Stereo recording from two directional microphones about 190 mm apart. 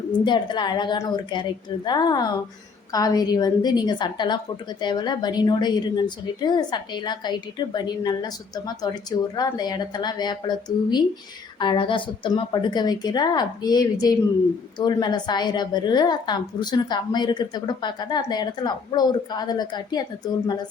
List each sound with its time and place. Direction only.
0.3 s a woman's voice: 25° left (ahead or behind)